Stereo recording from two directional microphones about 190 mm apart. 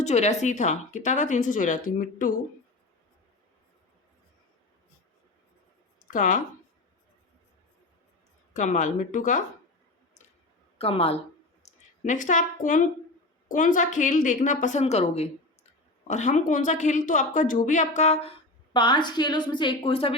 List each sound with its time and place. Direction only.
0.0 s a woman's voice: 35° left (ahead or behind)
6.0 s a sound: 45° left (ahead or behind)
8.5 s a woman's voice: 40° left (ahead or behind)
10.8 s a woman's voice: 30° left (ahead or behind)